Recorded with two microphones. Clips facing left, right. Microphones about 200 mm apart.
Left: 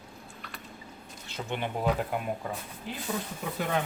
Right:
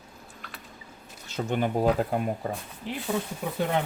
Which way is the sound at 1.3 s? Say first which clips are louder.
Right 7 dB; 45° right (ahead or behind).